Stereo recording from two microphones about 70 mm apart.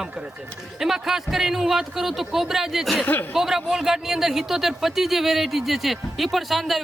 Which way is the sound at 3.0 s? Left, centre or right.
Left.